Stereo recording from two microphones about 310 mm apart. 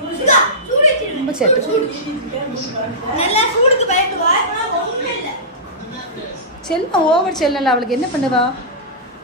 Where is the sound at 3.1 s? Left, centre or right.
Centre.